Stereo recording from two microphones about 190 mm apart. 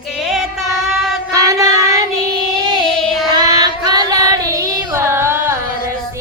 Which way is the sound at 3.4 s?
20° right (ahead or behind).